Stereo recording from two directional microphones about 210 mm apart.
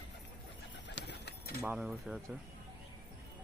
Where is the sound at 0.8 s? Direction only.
55° left (ahead or behind).